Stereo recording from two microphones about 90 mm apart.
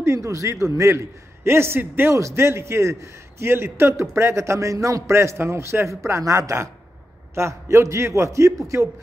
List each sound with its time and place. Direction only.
0.0 s a man's voice: 35° right (ahead or behind)